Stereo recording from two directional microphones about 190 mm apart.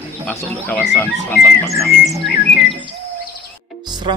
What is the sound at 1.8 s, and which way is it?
Music, centre (ahead or behind).